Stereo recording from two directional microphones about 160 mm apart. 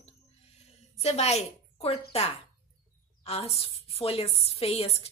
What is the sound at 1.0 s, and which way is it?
A woman's voice, 40° left (ahead or behind).